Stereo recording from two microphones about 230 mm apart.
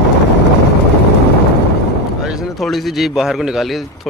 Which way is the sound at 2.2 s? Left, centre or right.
Centre.